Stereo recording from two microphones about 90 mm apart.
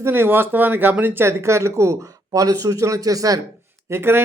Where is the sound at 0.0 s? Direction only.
25° right (ahead or behind); by 3.4 s 40° right (ahead or behind).